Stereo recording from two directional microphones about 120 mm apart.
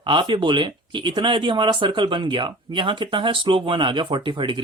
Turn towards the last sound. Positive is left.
turn(degrees=-40)  # may be behind; listen again after turning